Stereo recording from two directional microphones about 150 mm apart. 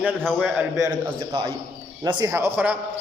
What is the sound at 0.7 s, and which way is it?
A man's voice, 25° right (ahead or behind).